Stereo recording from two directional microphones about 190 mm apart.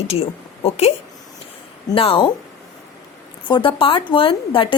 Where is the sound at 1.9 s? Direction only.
30° left (ahead or behind).